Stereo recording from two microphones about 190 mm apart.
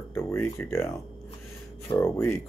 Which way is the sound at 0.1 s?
10° left (ahead or behind).